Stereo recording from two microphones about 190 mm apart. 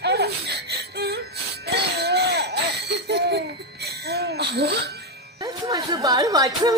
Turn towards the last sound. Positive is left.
turn(degrees=-20)  # may be behind; listen again after turning